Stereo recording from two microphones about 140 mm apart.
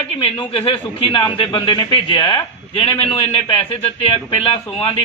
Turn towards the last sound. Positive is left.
turn(degrees=40)  # may be behind; listen again after turning